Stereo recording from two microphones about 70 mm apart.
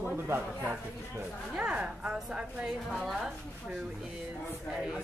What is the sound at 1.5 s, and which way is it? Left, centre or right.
A woman's voice, centre.